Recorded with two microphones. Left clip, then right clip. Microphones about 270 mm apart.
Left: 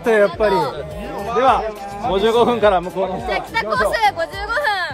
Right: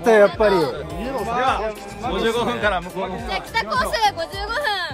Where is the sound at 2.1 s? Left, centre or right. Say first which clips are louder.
Left 6 dB; left.